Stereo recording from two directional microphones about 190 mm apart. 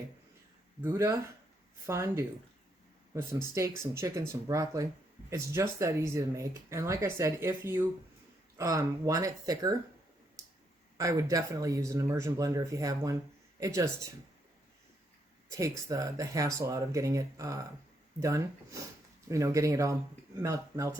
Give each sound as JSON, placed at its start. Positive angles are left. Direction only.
{"t": 0.8, "sound": "speech", "side_deg": -15}
{"t": 10.4, "sound": "clicking", "side_deg": -15}
{"t": 10.9, "sound": "speech", "side_deg": -15}
{"t": 15.5, "sound": "speech", "side_deg": -15}